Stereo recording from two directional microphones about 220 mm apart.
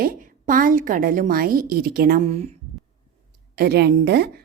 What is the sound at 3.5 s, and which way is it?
Speech, 45° right (ahead or behind).